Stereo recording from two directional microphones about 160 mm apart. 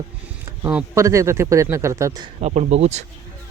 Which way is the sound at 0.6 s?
10° right (ahead or behind).